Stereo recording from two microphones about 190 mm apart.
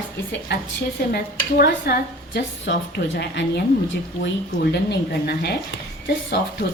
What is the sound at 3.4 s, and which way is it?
Speech, 70° left (ahead or behind).